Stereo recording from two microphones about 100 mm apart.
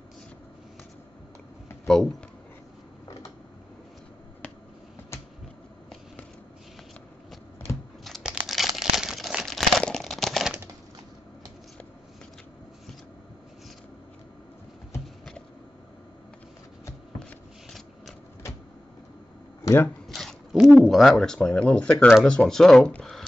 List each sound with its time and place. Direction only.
1.9 s speech: 5° left (ahead or behind)
7.7 s a sound: 25° left (ahead or behind)
8.0 s crumpling: centre (ahead or behind)
17.2 s shuffling cards: 5° left (ahead or behind)
20.1 s shuffling cards: centre (ahead or behind)
20.9 s speech: centre (ahead or behind)